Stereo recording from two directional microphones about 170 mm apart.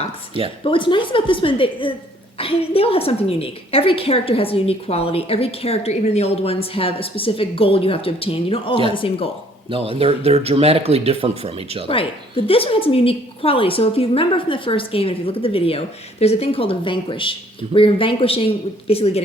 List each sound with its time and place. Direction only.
0.6 s a woman's voice: 30° left (ahead or behind)
9.6 s speech: 35° right (ahead or behind)
11.9 s a woman's voice: 35° left (ahead or behind)